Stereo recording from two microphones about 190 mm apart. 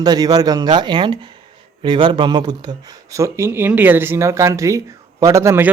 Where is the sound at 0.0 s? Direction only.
20° right (ahead or behind).